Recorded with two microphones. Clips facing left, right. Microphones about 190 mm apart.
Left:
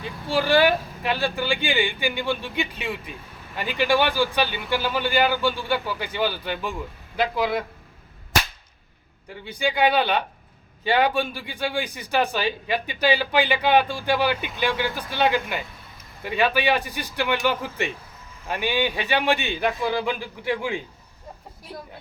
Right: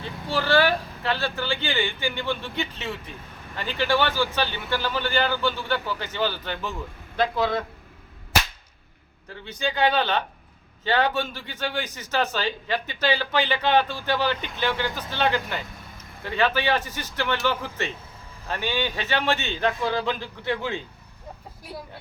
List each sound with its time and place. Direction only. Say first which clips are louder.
0.0 s speech: left 3 dB; 15° left (ahead or behind)
9.3 s speech: left 3 dB; 10° left (ahead or behind)
21.7 s speech: even; 10° right (ahead or behind)